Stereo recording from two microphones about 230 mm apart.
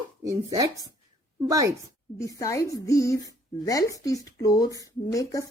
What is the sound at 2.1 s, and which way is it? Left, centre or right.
Speech, centre.